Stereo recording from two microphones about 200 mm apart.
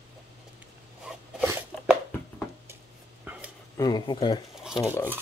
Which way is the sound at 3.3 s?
10° right (ahead or behind).